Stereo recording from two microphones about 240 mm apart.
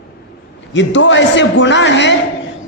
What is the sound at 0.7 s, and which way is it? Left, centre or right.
A man's voice, left.